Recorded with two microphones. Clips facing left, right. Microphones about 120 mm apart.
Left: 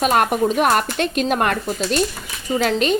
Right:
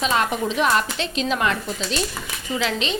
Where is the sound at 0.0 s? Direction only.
55° left (ahead or behind).